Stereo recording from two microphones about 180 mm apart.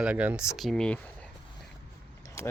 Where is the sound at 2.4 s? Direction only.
15° left (ahead or behind).